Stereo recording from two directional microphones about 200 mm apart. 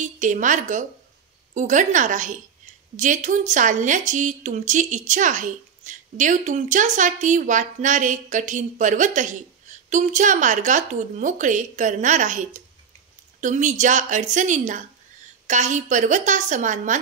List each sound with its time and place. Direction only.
0.0 s a woman's voice: 40° right (ahead or behind)